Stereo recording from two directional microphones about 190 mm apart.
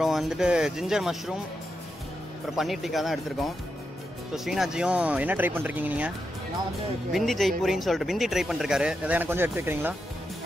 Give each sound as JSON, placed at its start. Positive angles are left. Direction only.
{"t": 0.0, "sound": "speech", "side_deg": 0}
{"t": 2.5, "sound": "speech", "side_deg": 0}